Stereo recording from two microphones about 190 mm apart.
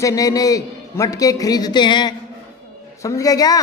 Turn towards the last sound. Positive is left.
turn(degrees=20)  # may be behind; listen again after turning